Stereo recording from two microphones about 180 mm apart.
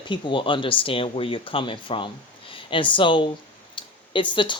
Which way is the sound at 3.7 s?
25° left (ahead or behind).